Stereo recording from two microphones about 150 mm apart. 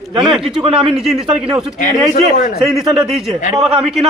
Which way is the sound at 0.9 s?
5° right (ahead or behind).